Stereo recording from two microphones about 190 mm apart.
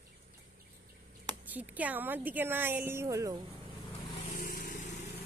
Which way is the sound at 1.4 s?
10° right (ahead or behind).